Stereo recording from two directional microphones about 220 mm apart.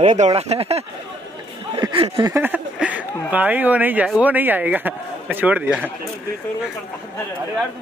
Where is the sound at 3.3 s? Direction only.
10° right (ahead or behind).